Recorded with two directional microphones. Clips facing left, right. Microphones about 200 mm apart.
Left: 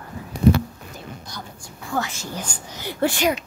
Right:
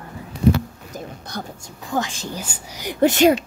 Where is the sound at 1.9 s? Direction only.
15° right (ahead or behind).